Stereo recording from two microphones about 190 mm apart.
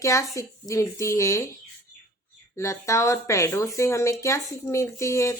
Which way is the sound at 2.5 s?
15° left (ahead or behind).